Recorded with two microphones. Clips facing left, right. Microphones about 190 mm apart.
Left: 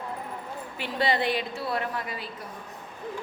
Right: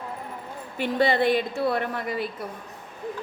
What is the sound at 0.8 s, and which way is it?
A woman's voice, 50° right (ahead or behind).